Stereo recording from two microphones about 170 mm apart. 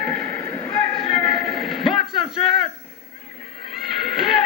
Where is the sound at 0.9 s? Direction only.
35° left (ahead or behind).